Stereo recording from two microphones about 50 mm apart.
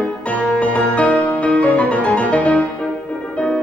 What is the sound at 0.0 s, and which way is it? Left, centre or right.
Music, left.